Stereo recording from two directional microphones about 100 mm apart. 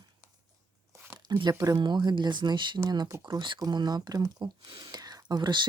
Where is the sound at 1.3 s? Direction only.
45° right (ahead or behind).